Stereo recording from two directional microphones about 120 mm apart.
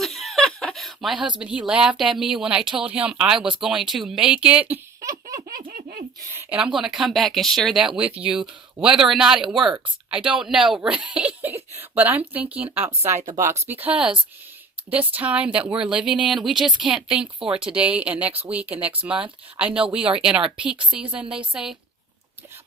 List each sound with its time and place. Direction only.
0.0 s chuckle: centre (ahead or behind)
1.4 s speech: 10° right (ahead or behind)
6.7 s speech: 5° right (ahead or behind)
10.8 s a sound: 10° right (ahead or behind)
13.3 s speech: 20° right (ahead or behind); by 21.8 s 5° right (ahead or behind)